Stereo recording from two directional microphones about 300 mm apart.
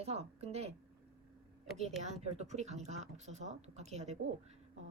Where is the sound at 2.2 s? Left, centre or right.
Right.